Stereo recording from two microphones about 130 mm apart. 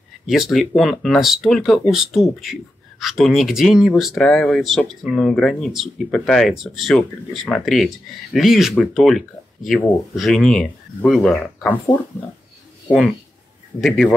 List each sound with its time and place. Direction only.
0.3 s speech: centre (ahead or behind)
13.7 s speech: 5° left (ahead or behind)